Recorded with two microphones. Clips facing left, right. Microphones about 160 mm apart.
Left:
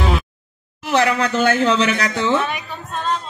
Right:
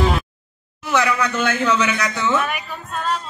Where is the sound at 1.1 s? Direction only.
35° left (ahead or behind).